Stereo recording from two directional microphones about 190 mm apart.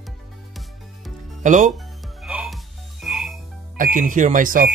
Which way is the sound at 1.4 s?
40° right (ahead or behind).